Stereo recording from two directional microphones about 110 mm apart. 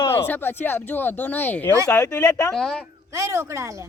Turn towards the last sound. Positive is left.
turn(degrees=-25)  # may be behind; listen again after turning